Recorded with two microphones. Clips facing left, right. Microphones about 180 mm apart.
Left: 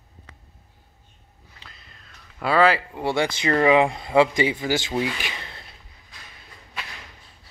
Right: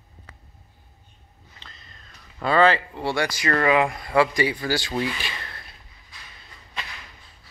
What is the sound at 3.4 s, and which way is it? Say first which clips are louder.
Speech: left 3 dB; 20° left (ahead or behind).